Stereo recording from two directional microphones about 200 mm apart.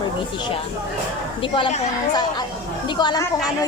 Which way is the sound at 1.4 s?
25° left (ahead or behind).